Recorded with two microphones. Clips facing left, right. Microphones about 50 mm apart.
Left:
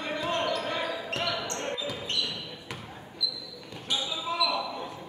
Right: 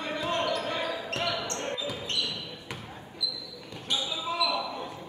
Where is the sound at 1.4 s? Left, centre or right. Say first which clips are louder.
Even; centre.